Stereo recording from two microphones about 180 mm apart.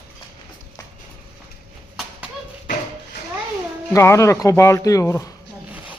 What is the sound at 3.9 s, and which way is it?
Speech, 15° left (ahead or behind).